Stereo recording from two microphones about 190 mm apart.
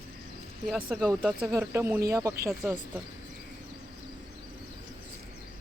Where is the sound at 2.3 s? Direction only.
50° right (ahead or behind).